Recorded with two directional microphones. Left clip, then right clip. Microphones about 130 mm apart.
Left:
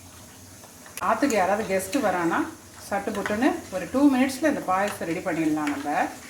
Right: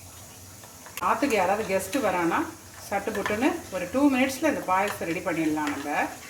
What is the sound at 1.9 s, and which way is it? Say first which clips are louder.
Speech: left 1 dB; 5° left (ahead or behind).